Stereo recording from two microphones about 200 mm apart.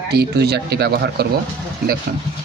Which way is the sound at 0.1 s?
55° right (ahead or behind).